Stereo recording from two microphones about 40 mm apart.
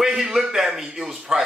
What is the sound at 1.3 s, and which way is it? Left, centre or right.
Speech, right.